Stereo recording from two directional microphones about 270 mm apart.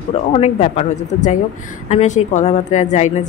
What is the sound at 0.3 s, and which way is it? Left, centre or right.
Speech, left.